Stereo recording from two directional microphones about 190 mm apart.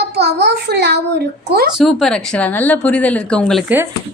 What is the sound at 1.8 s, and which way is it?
Speech, centre (ahead or behind).